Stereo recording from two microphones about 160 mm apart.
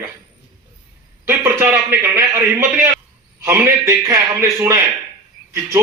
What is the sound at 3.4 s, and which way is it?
A man's voice, 15° right (ahead or behind).